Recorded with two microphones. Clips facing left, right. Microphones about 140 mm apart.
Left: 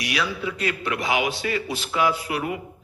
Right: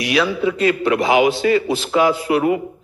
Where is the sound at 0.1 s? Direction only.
90° right.